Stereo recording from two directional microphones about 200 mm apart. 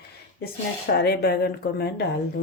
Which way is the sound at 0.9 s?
55° left (ahead or behind).